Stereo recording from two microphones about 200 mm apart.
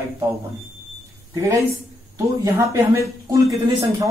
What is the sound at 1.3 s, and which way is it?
Speech, 15° right (ahead or behind).